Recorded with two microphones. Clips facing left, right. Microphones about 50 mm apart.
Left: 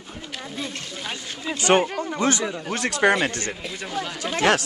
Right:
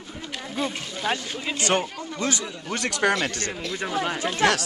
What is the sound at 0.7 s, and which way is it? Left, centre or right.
Speech, centre.